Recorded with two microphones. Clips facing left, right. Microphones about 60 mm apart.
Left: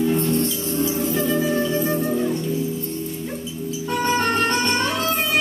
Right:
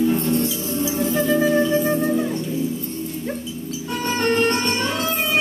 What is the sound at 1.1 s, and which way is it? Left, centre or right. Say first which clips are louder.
Music: right 4 dB; right.